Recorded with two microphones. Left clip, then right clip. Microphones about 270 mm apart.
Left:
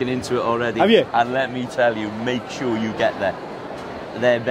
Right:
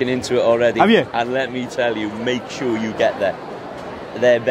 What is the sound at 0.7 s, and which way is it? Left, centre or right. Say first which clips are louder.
Speech: right 1 dB; centre.